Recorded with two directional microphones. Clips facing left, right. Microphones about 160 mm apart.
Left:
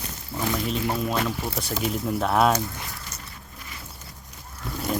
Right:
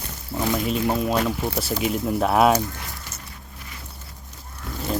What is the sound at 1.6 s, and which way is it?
Speech, 5° right (ahead or behind).